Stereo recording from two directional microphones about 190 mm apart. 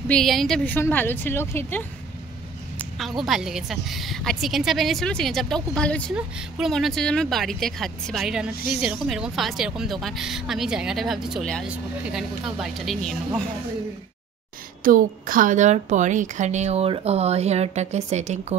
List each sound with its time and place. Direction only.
0.1 s a woman's voice: centre (ahead or behind)
2.8 s a sound: centre (ahead or behind)
3.3 s speech: centre (ahead or behind)
14.8 s a woman's voice: 45° right (ahead or behind)